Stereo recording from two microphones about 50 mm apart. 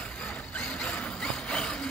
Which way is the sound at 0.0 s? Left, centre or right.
Left.